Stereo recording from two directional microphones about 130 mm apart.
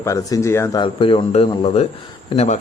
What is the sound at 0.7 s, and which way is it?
A man's voice, 40° left (ahead or behind).